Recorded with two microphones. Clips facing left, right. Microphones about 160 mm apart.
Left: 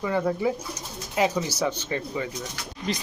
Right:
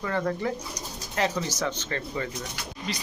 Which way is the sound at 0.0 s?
10° left (ahead or behind).